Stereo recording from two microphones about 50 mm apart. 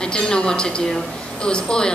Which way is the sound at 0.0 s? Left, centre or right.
Centre.